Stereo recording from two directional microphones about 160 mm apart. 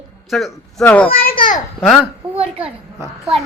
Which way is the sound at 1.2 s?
60° left (ahead or behind).